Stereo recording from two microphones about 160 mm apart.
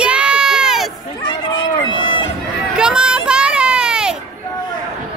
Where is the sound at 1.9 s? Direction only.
30° left (ahead or behind).